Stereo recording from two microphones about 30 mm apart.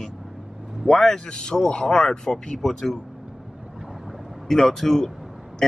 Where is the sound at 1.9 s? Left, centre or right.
Centre.